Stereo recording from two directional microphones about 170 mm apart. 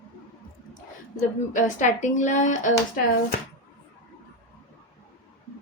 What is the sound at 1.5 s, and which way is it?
A woman's voice, 45° left (ahead or behind).